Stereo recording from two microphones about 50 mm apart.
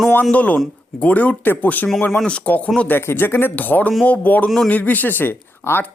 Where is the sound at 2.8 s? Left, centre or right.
Left.